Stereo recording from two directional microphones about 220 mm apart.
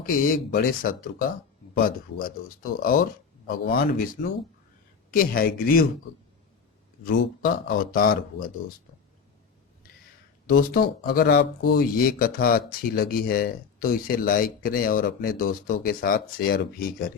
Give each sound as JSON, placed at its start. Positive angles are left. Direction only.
{"t": 0.0, "sound": "speech", "side_deg": 40}
{"t": 7.0, "sound": "speech", "side_deg": 40}
{"t": 10.6, "sound": "speech", "side_deg": 40}